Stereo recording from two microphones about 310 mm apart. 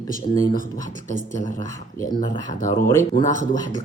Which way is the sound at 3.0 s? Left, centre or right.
Left.